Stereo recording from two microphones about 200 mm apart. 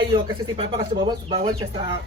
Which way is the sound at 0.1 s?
25° right (ahead or behind).